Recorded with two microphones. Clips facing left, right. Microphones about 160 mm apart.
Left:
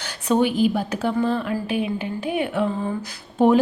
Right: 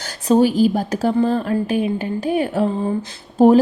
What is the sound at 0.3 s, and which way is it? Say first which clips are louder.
A woman's voice: right 5 dB; 35° right (ahead or behind).